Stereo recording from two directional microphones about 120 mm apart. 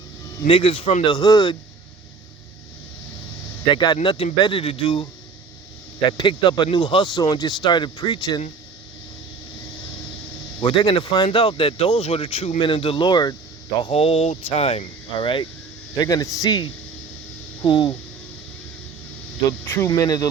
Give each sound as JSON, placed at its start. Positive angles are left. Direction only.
{"t": 0.4, "sound": "speech", "side_deg": 45}
{"t": 3.7, "sound": "speech", "side_deg": 40}
{"t": 10.6, "sound": "speech", "side_deg": 35}
{"t": 13.8, "sound": "speech", "side_deg": 55}
{"t": 16.0, "sound": "speech", "side_deg": 30}
{"t": 19.6, "sound": "speech", "side_deg": 15}
{"t": 19.9, "sound": "speech", "side_deg": 30}